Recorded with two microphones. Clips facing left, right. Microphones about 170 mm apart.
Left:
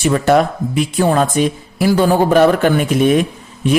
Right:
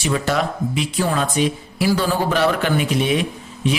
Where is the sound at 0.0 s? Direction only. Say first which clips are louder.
Left 8 dB; 50° left (ahead or behind).